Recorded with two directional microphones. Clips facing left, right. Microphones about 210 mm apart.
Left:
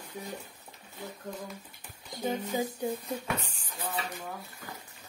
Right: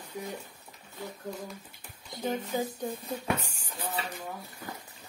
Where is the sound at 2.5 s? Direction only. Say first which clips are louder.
Even; 15° left (ahead or behind).